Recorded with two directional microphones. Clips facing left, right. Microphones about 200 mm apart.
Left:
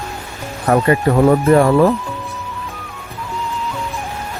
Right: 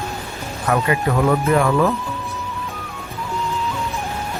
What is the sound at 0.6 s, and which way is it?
Speech, 40° left (ahead or behind).